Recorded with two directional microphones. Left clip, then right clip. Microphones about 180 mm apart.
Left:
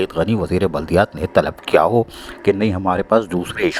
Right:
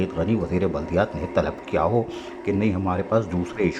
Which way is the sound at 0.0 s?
45° left (ahead or behind).